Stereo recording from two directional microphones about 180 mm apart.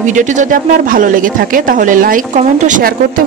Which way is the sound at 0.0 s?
45° right (ahead or behind).